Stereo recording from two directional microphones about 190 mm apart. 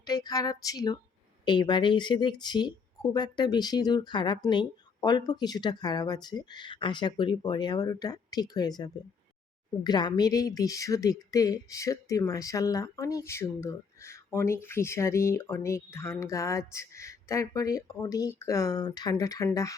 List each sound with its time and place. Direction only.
0.0 s a woman's voice: 20° left (ahead or behind)